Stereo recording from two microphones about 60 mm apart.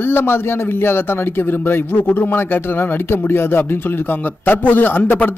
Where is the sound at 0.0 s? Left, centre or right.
Left.